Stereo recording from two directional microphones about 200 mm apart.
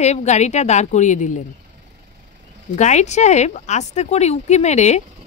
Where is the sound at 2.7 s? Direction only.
35° left (ahead or behind).